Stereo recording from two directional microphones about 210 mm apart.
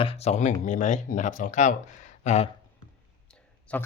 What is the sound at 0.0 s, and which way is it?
Speech, 30° left (ahead or behind).